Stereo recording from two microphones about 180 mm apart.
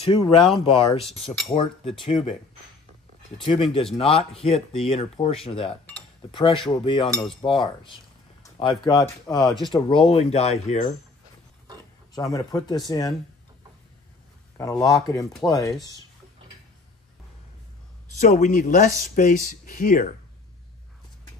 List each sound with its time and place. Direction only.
0.6 s speech: 30° left (ahead or behind)
3.3 s speech: 30° left (ahead or behind)
12.2 s speech: 20° left (ahead or behind)
14.6 s speech: 20° left (ahead or behind)
18.2 s speech: 45° left (ahead or behind)